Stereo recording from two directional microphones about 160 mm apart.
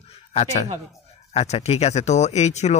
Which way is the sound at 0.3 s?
40° left (ahead or behind).